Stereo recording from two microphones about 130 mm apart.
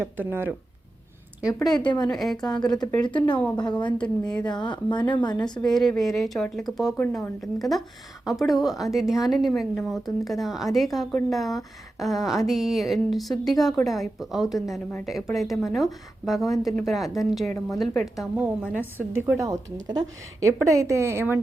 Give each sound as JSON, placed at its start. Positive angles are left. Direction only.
{"t": 0.0, "sound": "a woman's voice", "side_deg": -15}
{"t": 1.6, "sound": "a woman's voice", "side_deg": 5}
{"t": 2.6, "sound": "a woman's voice", "side_deg": 30}
{"t": 2.9, "sound": "speech", "side_deg": 10}
{"t": 3.2, "sound": "a woman's voice", "side_deg": 35}
{"t": 5.6, "sound": "a woman's voice", "side_deg": 0}